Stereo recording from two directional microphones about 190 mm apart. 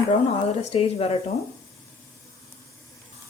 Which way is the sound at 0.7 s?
30° left (ahead or behind).